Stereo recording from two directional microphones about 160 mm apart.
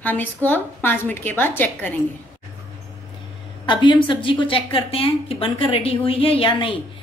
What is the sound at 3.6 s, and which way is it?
Speech, 30° left (ahead or behind).